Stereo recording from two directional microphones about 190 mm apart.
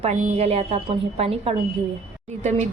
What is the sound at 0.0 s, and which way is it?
A woman's voice, 35° right (ahead or behind).